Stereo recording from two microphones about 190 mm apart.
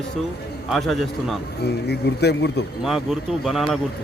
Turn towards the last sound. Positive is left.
turn(degrees=0)  # may be behind; listen again after turning